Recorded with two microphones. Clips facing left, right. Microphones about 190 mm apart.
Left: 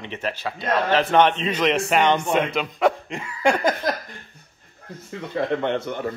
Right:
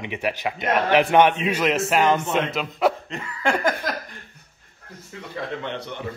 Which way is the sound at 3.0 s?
15° left (ahead or behind).